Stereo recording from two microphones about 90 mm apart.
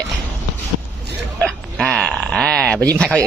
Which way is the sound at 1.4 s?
5° left (ahead or behind).